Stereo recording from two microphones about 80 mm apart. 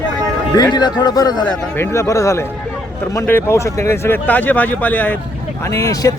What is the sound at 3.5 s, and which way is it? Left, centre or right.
Speech, left.